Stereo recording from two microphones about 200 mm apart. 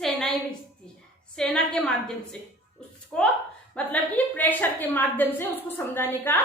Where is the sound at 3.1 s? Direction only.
5° left (ahead or behind).